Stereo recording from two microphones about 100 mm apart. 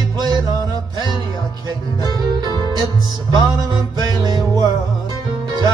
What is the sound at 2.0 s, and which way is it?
Music, 45° right (ahead or behind).